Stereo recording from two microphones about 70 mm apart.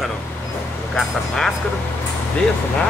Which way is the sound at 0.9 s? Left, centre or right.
Centre.